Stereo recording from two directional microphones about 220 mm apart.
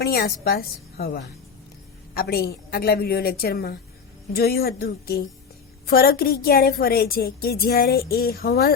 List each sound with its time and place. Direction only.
0.0 s a woman's voice: 45° left (ahead or behind)